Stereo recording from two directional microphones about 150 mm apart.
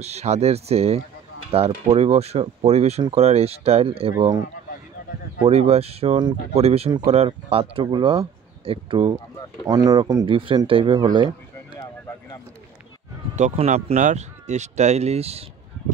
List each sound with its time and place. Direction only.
0.0 s speech: 45° right (ahead or behind)
4.1 s speech: 25° right (ahead or behind)
5.5 s speech: 45° right (ahead or behind)
13.4 s speech: 50° right (ahead or behind)